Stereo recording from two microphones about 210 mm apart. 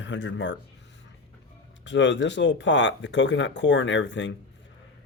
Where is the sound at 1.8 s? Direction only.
60° left (ahead or behind).